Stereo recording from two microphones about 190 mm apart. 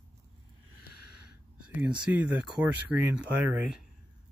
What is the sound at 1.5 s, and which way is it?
Speech, 5° right (ahead or behind).